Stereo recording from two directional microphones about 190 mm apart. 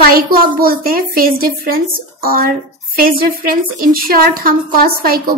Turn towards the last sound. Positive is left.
turn(degrees=-50)  # may be behind; listen again after turning